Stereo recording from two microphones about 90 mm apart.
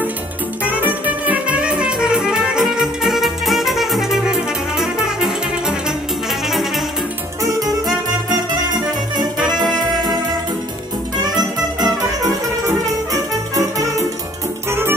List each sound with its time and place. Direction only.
0.7 s music: 20° right (ahead or behind)
7.4 s music: 40° right (ahead or behind)
11.3 s music: 40° right (ahead or behind)
14.7 s music: 25° right (ahead or behind)